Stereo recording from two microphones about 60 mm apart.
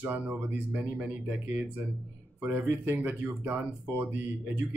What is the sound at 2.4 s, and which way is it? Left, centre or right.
Speech, right.